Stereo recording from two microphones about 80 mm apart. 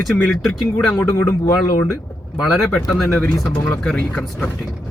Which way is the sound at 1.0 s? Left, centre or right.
Left.